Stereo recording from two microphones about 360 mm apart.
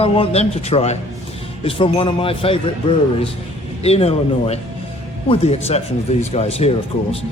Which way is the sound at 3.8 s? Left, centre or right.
Centre.